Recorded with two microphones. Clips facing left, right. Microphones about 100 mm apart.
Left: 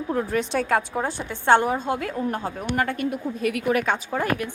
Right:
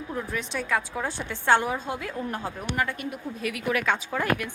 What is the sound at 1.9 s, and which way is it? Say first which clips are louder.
Speech: left 6 dB; 55° left (ahead or behind).